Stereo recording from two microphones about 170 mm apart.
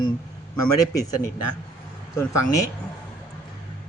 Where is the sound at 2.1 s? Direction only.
20° left (ahead or behind).